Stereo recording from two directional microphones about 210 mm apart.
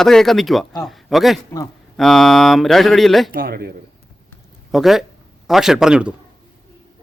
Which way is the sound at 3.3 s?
45° right (ahead or behind).